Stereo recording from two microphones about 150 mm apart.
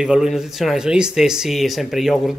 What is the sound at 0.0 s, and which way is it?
Speech, 5° right (ahead or behind).